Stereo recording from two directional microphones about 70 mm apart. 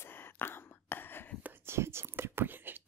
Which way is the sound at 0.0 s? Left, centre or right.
Left.